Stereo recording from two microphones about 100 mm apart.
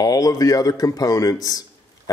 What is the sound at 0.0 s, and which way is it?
Speech, 40° left (ahead or behind).